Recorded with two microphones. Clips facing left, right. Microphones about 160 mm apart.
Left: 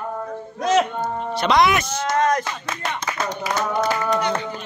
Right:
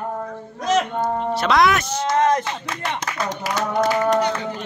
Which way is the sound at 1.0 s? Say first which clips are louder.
Right 2 dB; centre (ahead or behind).